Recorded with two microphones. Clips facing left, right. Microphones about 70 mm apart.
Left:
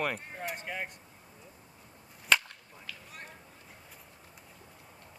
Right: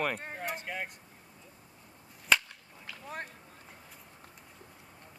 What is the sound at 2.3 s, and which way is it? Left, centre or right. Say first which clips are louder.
Whip: even; centre.